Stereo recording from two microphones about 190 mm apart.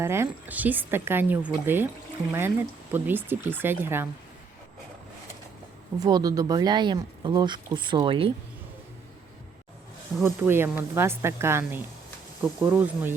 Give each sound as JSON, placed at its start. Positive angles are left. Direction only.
{"t": 0.0, "sound": "speech", "side_deg": -15}
{"t": 2.9, "sound": "speech", "side_deg": -10}
{"t": 6.0, "sound": "speech", "side_deg": -20}
{"t": 10.2, "sound": "speech", "side_deg": -10}